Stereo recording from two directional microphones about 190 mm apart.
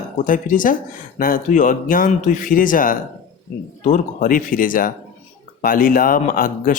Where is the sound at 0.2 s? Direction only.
45° left (ahead or behind).